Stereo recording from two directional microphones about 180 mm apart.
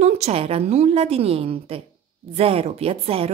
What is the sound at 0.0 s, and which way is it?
Speech, 35° right (ahead or behind).